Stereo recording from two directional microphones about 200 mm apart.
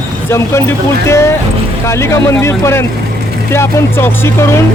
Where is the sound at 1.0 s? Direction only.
15° left (ahead or behind).